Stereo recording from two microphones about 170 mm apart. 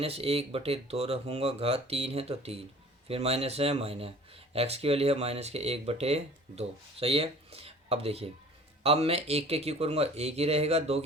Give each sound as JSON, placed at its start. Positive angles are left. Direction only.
{"t": 0.0, "sound": "speech", "side_deg": -35}